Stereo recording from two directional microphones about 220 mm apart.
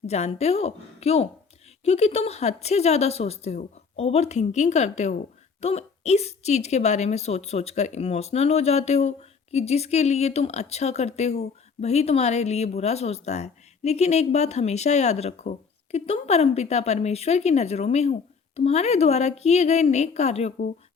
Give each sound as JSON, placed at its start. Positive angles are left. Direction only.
{"t": 0.1, "sound": "a woman's voice", "side_deg": 30}